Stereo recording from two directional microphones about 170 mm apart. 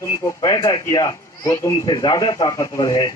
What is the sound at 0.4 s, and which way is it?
A man's voice, 20° left (ahead or behind).